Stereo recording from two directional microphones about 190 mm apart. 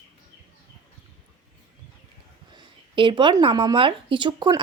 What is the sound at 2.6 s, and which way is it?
Speech, 25° right (ahead or behind).